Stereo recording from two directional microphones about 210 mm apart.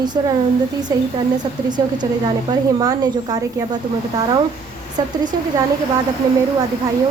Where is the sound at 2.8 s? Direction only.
20° right (ahead or behind).